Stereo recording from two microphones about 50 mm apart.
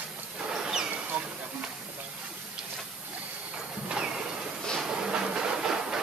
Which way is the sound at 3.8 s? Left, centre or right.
Centre.